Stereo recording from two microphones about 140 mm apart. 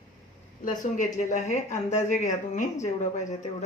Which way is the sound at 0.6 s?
65° left (ahead or behind).